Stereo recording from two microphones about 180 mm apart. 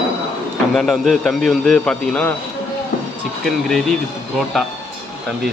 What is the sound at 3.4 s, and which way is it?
Speech, centre (ahead or behind).